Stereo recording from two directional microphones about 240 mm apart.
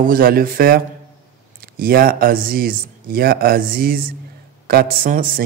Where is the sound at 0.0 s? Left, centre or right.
Right.